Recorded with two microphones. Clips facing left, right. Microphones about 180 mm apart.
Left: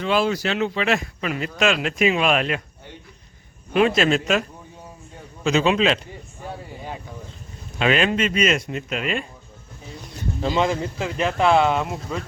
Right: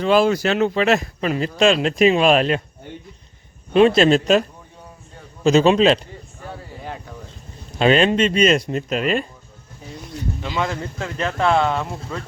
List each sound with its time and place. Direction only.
0.0 s speech: 45° right (ahead or behind)
3.7 s speech: 30° right (ahead or behind)
7.8 s speech: 30° right (ahead or behind)
10.5 s speech: 20° left (ahead or behind)